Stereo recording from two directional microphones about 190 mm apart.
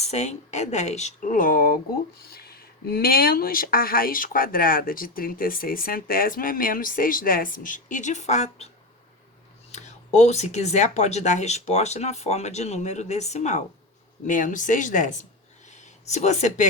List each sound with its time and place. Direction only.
0.0 s speech: 35° left (ahead or behind)
9.7 s speech: 35° left (ahead or behind)